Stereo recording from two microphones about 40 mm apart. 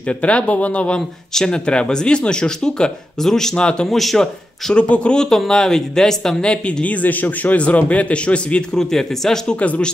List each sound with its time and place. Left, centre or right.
0.1 s a man's voice: left
0.9 s speech: centre
3.5 s speech: left
3.9 s speech: centre
4.7 s speech: left
5.5 s speech: centre
6.4 s a man's voice: left
8.7 s speech: centre
9.6 s a man's voice: left